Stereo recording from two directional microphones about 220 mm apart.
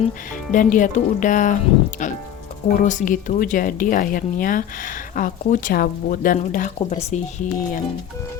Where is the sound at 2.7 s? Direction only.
35° left (ahead or behind).